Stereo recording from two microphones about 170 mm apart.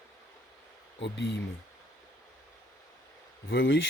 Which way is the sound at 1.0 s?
90° left.